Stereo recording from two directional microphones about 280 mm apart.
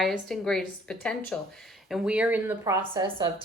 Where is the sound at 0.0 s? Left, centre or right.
Centre.